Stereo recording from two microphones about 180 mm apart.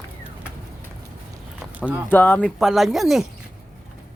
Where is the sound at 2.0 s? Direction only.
10° left (ahead or behind).